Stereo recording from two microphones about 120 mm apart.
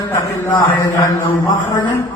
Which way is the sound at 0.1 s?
30° left (ahead or behind).